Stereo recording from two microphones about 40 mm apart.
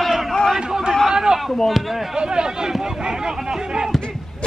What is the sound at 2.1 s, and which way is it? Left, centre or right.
Speech, centre.